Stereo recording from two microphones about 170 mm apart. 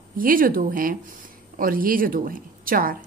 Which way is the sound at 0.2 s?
55° right (ahead or behind).